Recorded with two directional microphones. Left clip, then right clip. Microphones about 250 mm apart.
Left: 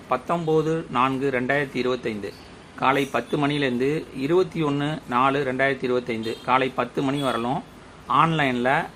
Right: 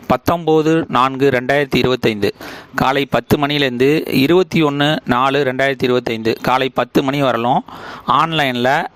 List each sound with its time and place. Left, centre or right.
0.1 s speech: right